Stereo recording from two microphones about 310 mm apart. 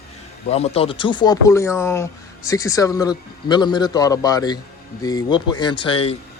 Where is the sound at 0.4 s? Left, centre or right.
Centre.